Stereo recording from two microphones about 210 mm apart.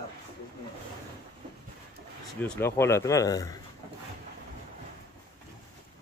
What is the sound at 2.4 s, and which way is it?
Speech, 10° left (ahead or behind).